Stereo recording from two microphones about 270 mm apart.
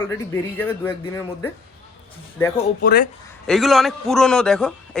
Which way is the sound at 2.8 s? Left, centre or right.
Left.